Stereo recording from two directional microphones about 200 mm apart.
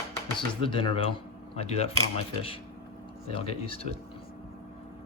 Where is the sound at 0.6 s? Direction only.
25° left (ahead or behind).